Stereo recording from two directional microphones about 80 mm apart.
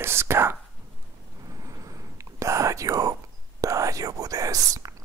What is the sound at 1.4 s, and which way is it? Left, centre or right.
Whispering, right.